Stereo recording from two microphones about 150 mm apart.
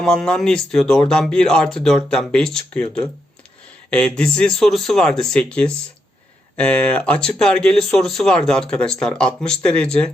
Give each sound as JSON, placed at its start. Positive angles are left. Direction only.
{"t": 0.0, "sound": "speech", "side_deg": 0}